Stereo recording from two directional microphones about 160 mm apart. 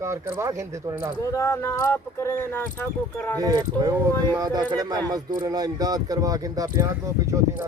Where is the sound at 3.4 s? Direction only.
20° right (ahead or behind).